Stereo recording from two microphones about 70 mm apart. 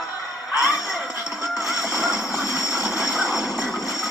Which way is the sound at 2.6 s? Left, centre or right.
Left.